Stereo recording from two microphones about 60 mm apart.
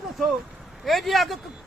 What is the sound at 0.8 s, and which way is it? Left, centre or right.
Speech, centre.